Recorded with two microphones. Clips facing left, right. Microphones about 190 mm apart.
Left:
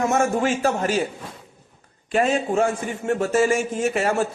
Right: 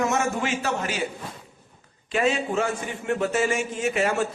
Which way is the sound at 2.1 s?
45° left (ahead or behind).